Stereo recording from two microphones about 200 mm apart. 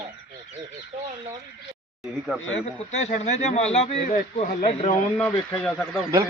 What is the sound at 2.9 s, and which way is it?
Speech, 35° left (ahead or behind).